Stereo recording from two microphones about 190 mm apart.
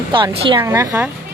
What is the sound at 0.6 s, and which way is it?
Speech, 15° right (ahead or behind).